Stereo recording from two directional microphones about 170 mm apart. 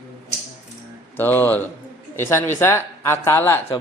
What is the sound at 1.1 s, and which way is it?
Speech, 10° left (ahead or behind).